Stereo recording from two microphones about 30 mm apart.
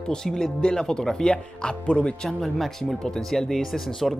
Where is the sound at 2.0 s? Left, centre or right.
Left.